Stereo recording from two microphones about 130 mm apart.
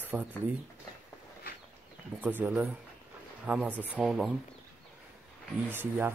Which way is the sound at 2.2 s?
15° right (ahead or behind).